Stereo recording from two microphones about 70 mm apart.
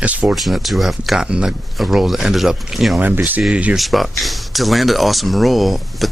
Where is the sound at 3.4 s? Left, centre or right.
Centre.